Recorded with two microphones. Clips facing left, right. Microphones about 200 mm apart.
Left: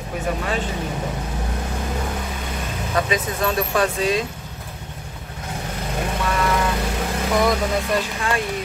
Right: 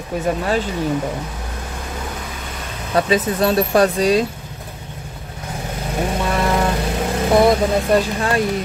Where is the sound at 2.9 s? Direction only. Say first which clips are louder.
Right 6 dB; 35° right (ahead or behind).